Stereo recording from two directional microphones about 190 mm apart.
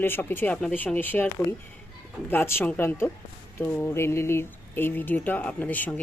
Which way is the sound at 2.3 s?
10° left (ahead or behind).